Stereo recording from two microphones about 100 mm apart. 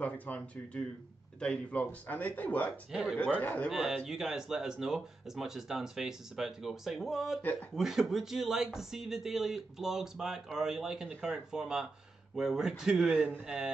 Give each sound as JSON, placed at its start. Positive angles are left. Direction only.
{"t": 0.0, "sound": "speech", "side_deg": 15}
{"t": 2.9, "sound": "speech", "side_deg": -5}
{"t": 3.2, "sound": "speech", "side_deg": 15}
{"t": 3.6, "sound": "speech", "side_deg": -5}